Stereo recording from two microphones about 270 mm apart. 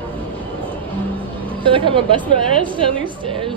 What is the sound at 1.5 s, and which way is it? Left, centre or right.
A woman's voice, centre.